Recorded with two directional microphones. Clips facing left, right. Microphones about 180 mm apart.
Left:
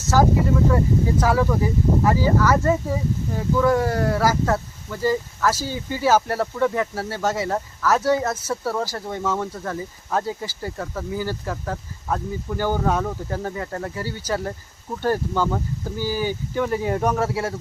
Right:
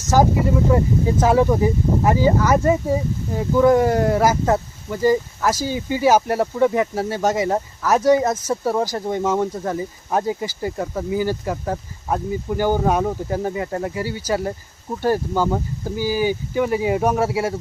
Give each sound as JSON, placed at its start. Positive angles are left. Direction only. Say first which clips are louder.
{"t": 0.1, "sound": "speech", "louder": "right 2 dB", "side_deg": -15}